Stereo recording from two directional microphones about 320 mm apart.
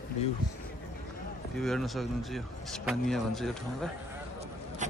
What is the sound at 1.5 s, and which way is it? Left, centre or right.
Speech, centre.